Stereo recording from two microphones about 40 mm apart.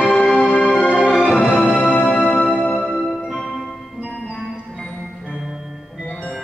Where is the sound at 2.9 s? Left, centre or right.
Centre.